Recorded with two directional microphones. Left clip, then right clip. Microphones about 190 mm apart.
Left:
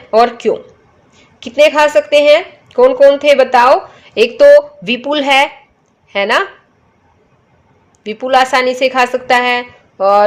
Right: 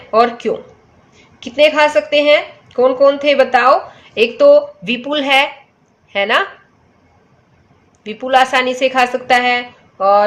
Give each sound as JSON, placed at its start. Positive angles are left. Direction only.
{"t": 0.1, "sound": "a woman's voice", "side_deg": 35}
{"t": 8.0, "sound": "a woman's voice", "side_deg": 30}